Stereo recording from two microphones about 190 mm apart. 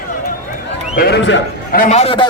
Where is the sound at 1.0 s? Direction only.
60° left (ahead or behind).